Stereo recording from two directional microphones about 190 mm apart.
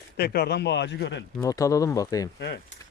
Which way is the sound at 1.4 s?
20° left (ahead or behind).